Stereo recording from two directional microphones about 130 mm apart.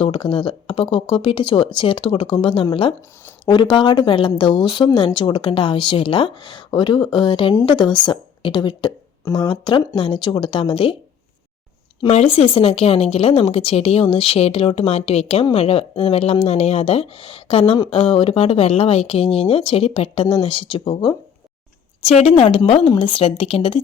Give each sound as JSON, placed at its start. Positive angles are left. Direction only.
{"t": 0.0, "sound": "a woman's voice", "side_deg": 40}
{"t": 12.0, "sound": "speech", "side_deg": 50}
{"t": 22.0, "sound": "speech", "side_deg": 55}